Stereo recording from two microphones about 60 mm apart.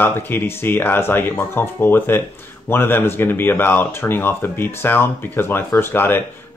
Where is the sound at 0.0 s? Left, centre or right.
Left.